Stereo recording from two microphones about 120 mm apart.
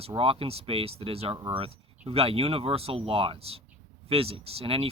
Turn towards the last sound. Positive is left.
turn(degrees=-50)  # may be behind; listen again after turning